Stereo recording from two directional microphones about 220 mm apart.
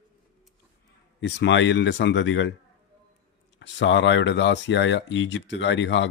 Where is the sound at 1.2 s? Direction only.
50° left (ahead or behind).